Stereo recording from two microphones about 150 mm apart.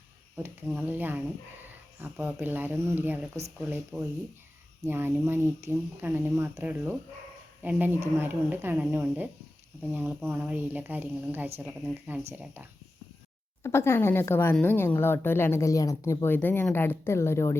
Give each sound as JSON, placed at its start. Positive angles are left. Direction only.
{"t": 0.8, "sound": "speech", "side_deg": -10}
{"t": 4.9, "sound": "speech", "side_deg": -15}
{"t": 13.6, "sound": "speech", "side_deg": 20}